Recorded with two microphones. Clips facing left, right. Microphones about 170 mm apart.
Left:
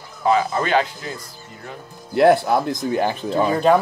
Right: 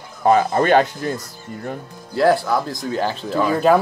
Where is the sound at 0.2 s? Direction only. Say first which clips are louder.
Right 3 dB; 50° right (ahead or behind).